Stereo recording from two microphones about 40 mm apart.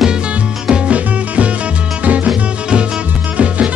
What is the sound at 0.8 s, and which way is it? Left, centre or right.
Music, right.